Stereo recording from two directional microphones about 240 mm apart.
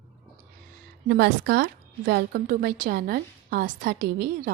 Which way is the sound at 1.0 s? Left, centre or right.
Right.